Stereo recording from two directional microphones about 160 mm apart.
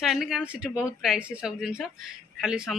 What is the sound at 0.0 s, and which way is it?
Speech, centre (ahead or behind).